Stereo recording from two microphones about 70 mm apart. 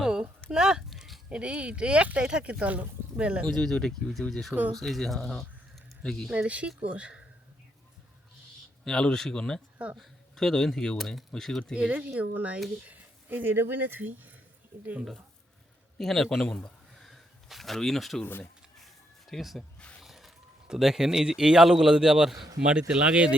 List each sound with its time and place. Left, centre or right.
0.0 s a sound: centre
0.5 s speech: centre
0.9 s a sound: centre
1.3 s speech: centre
3.4 s speech: centre
6.3 s speech: centre
8.8 s speech: centre
11.7 s speech: centre
16.0 s speech: centre
16.6 s a sound: centre
18.2 s speech: left
19.3 s speech: centre